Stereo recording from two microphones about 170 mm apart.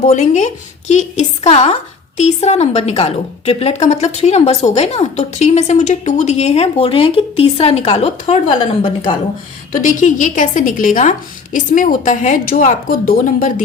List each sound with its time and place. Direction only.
0.0 s a woman's voice: 45° left (ahead or behind)
9.8 s a woman's voice: 50° left (ahead or behind)